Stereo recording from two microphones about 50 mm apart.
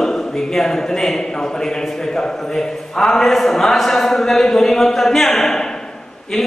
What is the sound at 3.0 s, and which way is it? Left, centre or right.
Speech, centre.